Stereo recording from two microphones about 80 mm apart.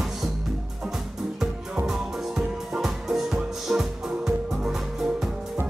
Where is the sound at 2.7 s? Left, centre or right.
Centre.